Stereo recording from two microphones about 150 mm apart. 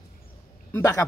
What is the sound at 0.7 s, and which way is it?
Speech, 20° left (ahead or behind).